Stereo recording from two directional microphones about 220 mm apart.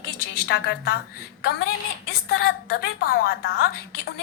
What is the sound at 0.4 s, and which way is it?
Speech, 45° left (ahead or behind).